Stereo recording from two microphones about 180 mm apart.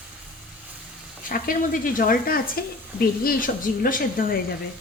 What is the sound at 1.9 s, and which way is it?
A woman's voice, 55° left (ahead or behind).